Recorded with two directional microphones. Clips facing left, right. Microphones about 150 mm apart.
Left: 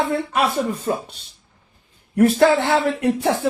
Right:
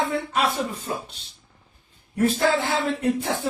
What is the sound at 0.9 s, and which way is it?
Speech, 55° left (ahead or behind).